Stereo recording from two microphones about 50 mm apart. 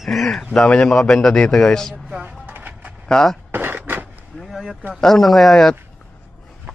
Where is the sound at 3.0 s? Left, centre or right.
Centre.